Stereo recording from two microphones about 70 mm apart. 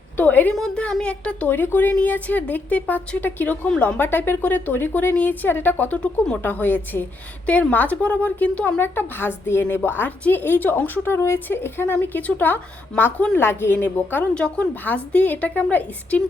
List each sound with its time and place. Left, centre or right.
0.2 s a woman's voice: left
1.0 s a woman's voice: centre
1.5 s a woman's voice: left
8.8 s a woman's voice: left
14.3 s a woman's voice: centre